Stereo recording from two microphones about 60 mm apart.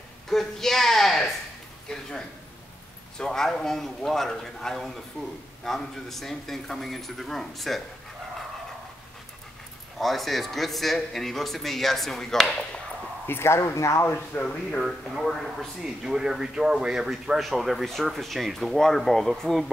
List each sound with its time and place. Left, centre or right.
0.3 s a man's voice: centre
9.9 s a man's voice: centre
13.3 s speech: left
14.0 s speech: left
14.9 s a man's voice: centre